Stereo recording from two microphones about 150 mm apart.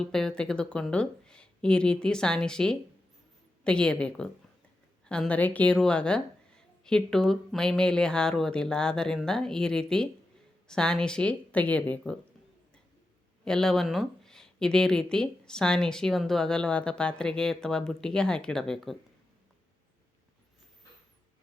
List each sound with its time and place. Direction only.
0.0 s a woman's voice: 5° left (ahead or behind)
13.4 s speech: 5° left (ahead or behind)